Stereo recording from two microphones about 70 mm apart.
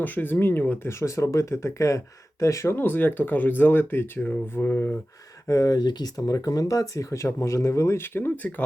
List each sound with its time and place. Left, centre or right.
0.0 s speech: left
0.9 s speech: left
2.7 s speech: left
5.5 s speech: left